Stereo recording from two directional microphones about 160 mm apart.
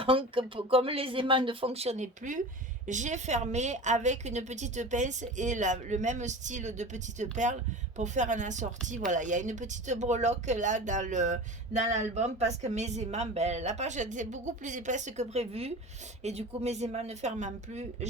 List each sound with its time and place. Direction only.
0.0 s speech: 35° right (ahead or behind)